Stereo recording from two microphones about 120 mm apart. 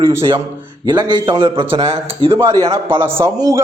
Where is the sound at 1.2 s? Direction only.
45° right (ahead or behind).